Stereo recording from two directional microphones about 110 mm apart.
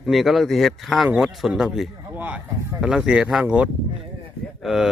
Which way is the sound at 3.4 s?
10° right (ahead or behind).